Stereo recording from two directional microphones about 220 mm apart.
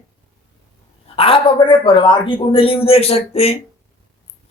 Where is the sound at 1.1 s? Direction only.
25° left (ahead or behind).